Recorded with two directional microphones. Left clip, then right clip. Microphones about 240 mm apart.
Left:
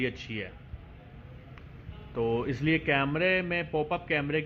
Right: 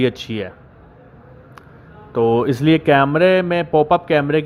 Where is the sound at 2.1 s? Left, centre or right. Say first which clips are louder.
Right 14 dB; right.